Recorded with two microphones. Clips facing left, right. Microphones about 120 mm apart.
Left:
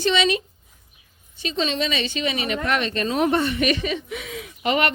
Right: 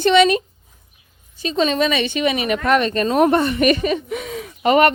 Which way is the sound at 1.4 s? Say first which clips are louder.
Right 6 dB; 45° right (ahead or behind).